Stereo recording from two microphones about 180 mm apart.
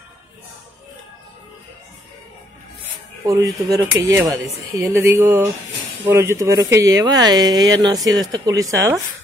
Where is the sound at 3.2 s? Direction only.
20° right (ahead or behind).